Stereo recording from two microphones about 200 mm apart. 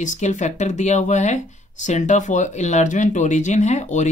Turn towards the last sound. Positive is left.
turn(degrees=35)  # may be behind; listen again after turning